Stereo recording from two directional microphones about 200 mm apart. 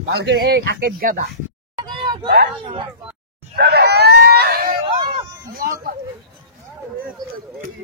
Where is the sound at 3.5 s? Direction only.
50° right (ahead or behind).